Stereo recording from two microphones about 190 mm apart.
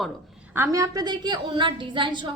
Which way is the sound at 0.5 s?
15° right (ahead or behind).